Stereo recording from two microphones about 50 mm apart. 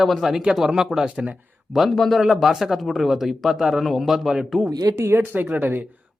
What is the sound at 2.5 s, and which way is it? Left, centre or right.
Speech, centre.